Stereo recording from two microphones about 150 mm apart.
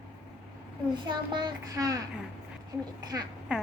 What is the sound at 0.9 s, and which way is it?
A woman's voice, 30° right (ahead or behind).